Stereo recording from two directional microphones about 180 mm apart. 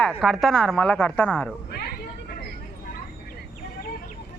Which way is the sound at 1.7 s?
60° left (ahead or behind).